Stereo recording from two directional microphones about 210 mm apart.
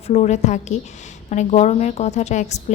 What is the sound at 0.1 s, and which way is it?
Speech, 35° left (ahead or behind).